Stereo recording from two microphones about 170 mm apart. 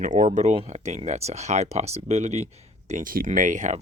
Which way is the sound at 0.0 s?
50° right (ahead or behind).